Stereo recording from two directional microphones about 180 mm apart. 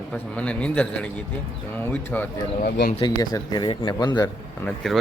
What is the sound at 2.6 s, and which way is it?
Speech, 60° left (ahead or behind).